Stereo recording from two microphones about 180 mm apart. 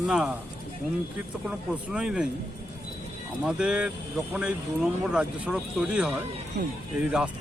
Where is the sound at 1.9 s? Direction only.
5° right (ahead or behind).